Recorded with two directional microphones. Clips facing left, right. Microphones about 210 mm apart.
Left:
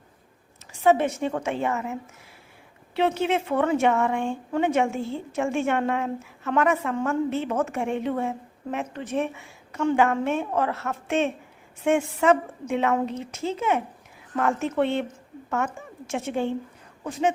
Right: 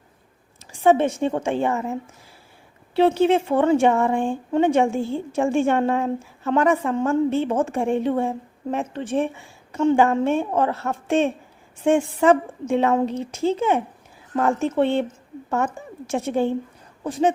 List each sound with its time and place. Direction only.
0.7 s a woman's voice: 30° right (ahead or behind)